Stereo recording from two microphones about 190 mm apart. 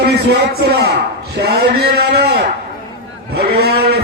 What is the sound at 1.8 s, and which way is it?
Guitar, 60° right (ahead or behind).